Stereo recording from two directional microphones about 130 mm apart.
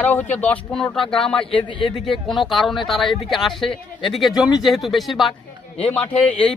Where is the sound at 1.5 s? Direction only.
40° left (ahead or behind).